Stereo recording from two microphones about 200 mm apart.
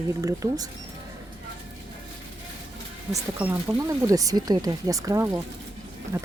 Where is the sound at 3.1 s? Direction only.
10° right (ahead or behind).